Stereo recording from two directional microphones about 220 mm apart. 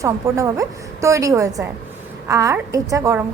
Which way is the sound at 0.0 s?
15° right (ahead or behind).